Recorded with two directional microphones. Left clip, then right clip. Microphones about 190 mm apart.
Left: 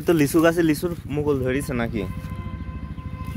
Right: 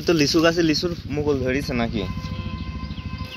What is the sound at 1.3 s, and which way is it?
Speech, 35° left (ahead or behind).